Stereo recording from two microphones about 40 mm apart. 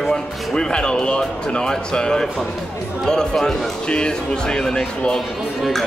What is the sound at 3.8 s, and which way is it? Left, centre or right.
Speech, left.